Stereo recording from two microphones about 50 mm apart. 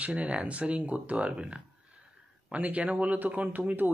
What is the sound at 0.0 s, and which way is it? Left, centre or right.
Speech, right.